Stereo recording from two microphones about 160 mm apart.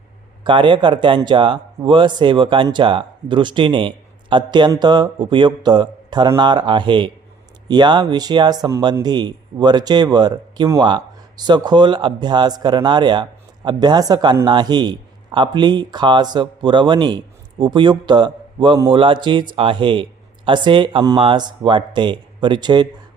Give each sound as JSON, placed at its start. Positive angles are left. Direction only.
{"t": 0.4, "sound": "a man's voice", "side_deg": -30}